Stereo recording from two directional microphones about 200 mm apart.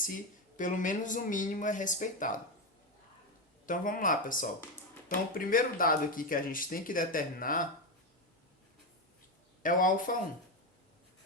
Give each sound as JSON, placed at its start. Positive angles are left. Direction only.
{"t": 0.5, "sound": "speech", "side_deg": 40}
{"t": 3.7, "sound": "speech", "side_deg": 40}
{"t": 9.6, "sound": "speech", "side_deg": 40}